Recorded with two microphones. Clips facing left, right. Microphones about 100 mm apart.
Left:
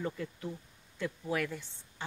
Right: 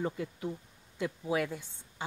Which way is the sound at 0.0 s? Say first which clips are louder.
Right 3 dB; 15° right (ahead or behind).